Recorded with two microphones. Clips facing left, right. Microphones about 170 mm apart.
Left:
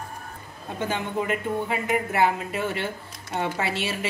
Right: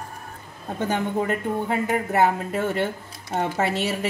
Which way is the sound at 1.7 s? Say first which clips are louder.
Right 2 dB; 40° right (ahead or behind).